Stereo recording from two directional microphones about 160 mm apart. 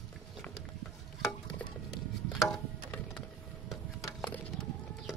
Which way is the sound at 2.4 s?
5° left (ahead or behind).